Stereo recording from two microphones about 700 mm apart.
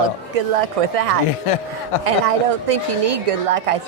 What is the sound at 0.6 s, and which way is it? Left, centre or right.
A woman's voice, right.